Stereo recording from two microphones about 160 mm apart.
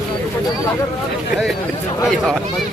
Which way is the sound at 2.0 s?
5° left (ahead or behind).